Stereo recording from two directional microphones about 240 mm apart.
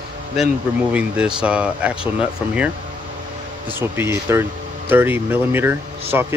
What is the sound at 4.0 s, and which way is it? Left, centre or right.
Speech, centre.